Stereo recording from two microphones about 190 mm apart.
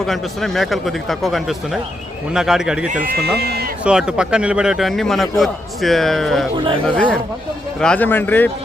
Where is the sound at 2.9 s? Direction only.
45° right (ahead or behind).